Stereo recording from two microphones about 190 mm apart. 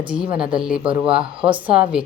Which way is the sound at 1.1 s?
25° right (ahead or behind).